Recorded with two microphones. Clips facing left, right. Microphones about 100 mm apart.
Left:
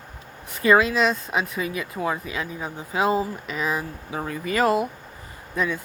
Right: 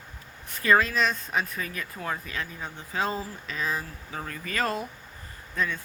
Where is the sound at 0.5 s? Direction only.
15° left (ahead or behind).